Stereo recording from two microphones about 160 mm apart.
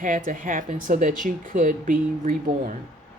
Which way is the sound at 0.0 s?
55° right (ahead or behind).